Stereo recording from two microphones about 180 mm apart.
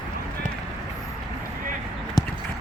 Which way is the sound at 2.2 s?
20° left (ahead or behind).